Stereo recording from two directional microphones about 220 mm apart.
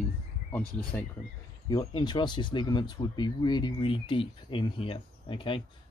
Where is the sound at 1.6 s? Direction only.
20° left (ahead or behind).